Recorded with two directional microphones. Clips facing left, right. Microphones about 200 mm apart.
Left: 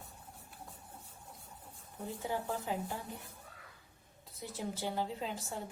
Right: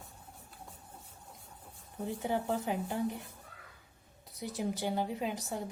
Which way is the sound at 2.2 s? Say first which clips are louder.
Right 4 dB; 20° right (ahead or behind).